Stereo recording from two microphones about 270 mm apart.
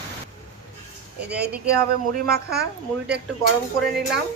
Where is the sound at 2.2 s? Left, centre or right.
Right.